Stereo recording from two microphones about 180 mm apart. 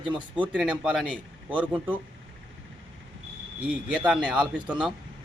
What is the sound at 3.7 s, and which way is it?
Speech, 5° right (ahead or behind).